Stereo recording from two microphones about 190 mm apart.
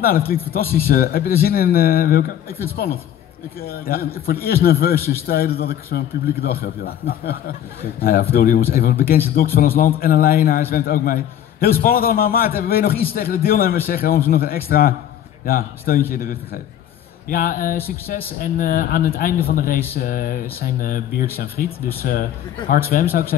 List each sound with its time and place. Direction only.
0.5 s a man's voice: 50° left (ahead or behind)